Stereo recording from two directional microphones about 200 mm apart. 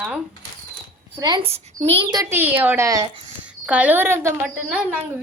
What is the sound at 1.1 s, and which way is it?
A woman's voice, 20° right (ahead or behind).